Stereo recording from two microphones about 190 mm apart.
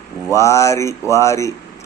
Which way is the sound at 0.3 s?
15° left (ahead or behind).